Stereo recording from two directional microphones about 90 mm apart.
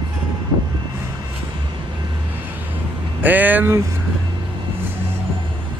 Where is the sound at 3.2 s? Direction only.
20° right (ahead or behind).